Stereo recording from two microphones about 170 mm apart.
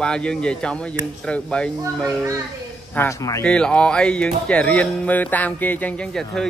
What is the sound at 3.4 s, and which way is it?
Speech, 5° left (ahead or behind).